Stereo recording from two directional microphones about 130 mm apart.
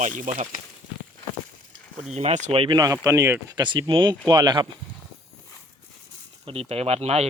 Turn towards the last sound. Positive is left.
turn(degrees=-55)  # may be behind; listen again after turning